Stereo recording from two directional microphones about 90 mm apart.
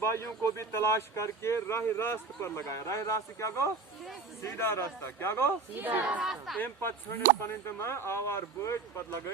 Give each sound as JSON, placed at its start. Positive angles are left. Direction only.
{"t": 0.0, "sound": "speech", "side_deg": 35}
{"t": 5.7, "sound": "speech", "side_deg": -20}
{"t": 7.4, "sound": "speech", "side_deg": 30}